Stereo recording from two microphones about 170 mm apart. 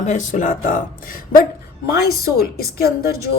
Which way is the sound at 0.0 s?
45° left (ahead or behind).